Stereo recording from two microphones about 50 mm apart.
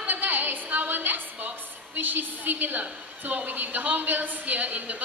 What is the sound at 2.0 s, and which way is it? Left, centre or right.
A woman's voice, right.